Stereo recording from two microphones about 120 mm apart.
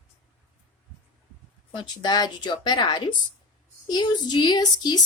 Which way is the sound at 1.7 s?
40° left (ahead or behind).